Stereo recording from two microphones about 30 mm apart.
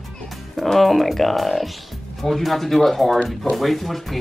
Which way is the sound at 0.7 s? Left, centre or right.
Centre.